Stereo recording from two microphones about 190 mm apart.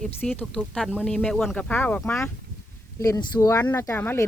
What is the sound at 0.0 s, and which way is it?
Speech, 5° left (ahead or behind).